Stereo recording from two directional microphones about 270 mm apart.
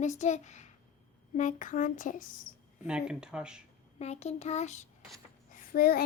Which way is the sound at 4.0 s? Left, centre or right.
Left.